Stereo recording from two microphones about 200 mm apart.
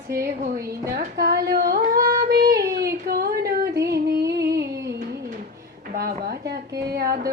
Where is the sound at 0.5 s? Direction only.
15° right (ahead or behind).